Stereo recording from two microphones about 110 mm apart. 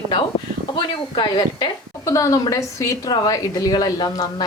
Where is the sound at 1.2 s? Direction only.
45° left (ahead or behind).